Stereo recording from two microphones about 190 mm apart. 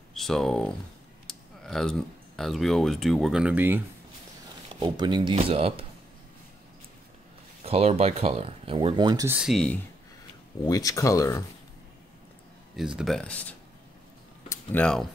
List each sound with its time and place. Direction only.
0.1 s speech: centre (ahead or behind)
4.7 s speech: 25° right (ahead or behind)
7.6 s speech: 30° right (ahead or behind)
9.4 s speech: centre (ahead or behind)
10.7 s speech: 20° left (ahead or behind)
12.7 s speech: centre (ahead or behind)